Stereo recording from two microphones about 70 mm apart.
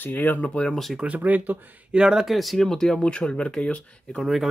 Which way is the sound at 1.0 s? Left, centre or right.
Right.